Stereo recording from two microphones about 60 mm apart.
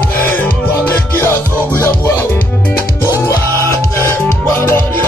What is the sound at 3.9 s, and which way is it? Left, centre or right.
Music, left.